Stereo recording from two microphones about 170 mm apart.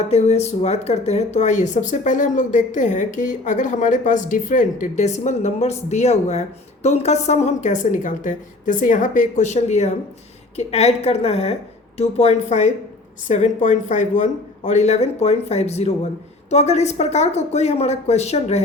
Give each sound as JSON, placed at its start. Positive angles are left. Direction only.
{"t": 0.1, "sound": "speech", "side_deg": 40}